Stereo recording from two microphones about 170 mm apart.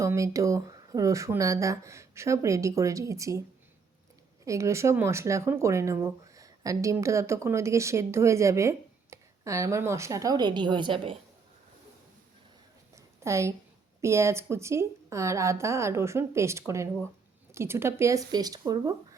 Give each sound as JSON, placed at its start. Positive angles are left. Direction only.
{"t": 0.0, "sound": "speech", "side_deg": -20}
{"t": 4.4, "sound": "speech", "side_deg": -15}
{"t": 13.2, "sound": "speech", "side_deg": -15}